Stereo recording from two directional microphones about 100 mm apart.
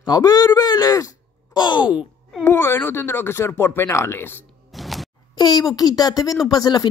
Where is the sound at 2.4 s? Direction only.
25° left (ahead or behind).